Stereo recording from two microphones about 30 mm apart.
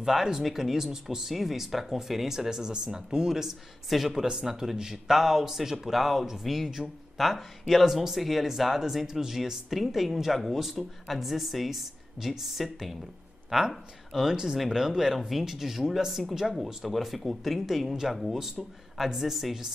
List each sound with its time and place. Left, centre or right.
0.0 s speech: centre
2.7 s speech: right; by 4.1 s centre
4.1 s speech: right
14.6 s speech: centre
14.9 s speech: centre
15.1 s speech: centre
18.9 s speech: centre